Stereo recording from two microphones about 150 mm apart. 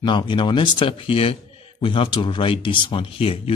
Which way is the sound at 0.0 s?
30° left (ahead or behind).